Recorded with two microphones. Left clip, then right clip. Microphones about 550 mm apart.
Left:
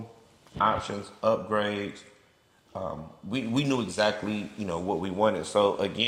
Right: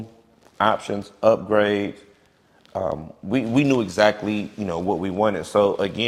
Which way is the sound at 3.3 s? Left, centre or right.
Right.